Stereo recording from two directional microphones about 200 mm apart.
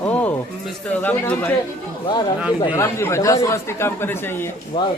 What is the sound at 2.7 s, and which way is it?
Speech, 15° left (ahead or behind).